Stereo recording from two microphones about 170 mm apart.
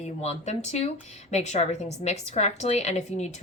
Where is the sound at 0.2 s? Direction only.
40° left (ahead or behind).